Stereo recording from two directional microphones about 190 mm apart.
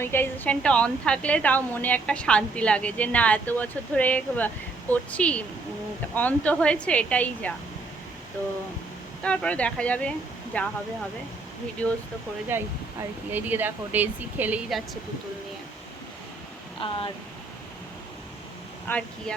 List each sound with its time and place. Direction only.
0.0 s a woman's voice: 10° left (ahead or behind)
9.2 s a woman's voice: 5° left (ahead or behind)
12.5 s speech: 10° right (ahead or behind)
16.8 s speech: 30° left (ahead or behind)
18.9 s a woman's voice: 10° left (ahead or behind)